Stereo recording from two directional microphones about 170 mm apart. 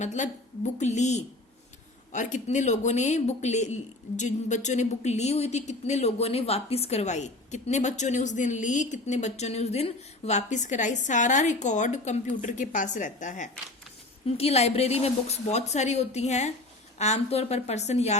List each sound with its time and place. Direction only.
0.0 s speech: 45° left (ahead or behind)
14.3 s a woman's voice: 35° left (ahead or behind)